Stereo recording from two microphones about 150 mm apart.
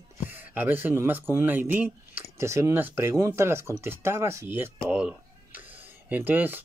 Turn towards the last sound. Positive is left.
turn(degrees=-10)  # may be behind; listen again after turning